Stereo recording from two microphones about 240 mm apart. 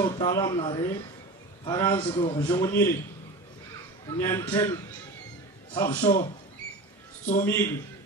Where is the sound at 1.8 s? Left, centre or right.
Centre.